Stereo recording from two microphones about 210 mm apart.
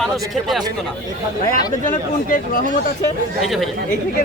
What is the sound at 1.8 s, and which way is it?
Speech, 40° left (ahead or behind).